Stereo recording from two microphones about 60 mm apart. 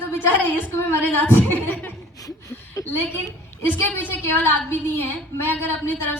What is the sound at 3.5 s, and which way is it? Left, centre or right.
A woman's voice, left.